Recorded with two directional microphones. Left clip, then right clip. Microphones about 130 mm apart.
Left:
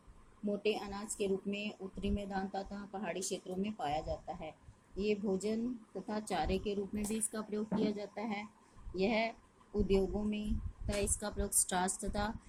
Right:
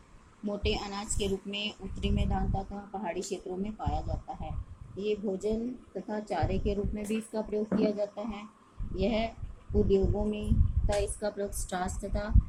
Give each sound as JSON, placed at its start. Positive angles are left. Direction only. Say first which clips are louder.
{"t": 0.6, "sound": "speech", "louder": "right 4 dB", "side_deg": 75}
{"t": 7.3, "sound": "speech", "louder": "right 9 dB", "side_deg": 55}
{"t": 10.9, "sound": "a woman's voice", "louder": "right 7 dB", "side_deg": 70}